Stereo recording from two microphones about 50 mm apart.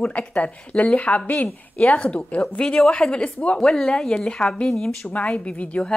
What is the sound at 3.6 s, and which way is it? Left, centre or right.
Speech, centre.